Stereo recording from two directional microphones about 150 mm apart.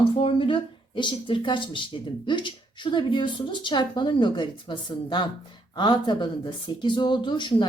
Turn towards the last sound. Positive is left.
turn(degrees=30)  # may be behind; listen again after turning